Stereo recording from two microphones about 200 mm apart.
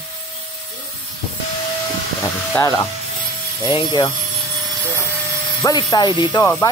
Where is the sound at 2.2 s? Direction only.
15° left (ahead or behind).